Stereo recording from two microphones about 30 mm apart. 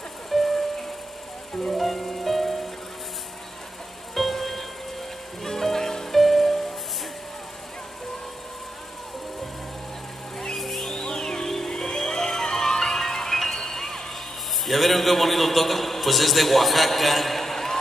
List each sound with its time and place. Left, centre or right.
0.3 s music: centre
4.1 s music: centre
10.6 s music: centre
11.1 s music: left
14.7 s a man's voice: centre